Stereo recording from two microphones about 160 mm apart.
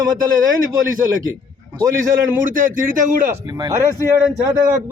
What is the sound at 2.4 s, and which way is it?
Speech, 55° right (ahead or behind).